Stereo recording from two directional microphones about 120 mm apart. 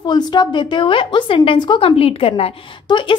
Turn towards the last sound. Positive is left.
turn(degrees=50)  # may be behind; listen again after turning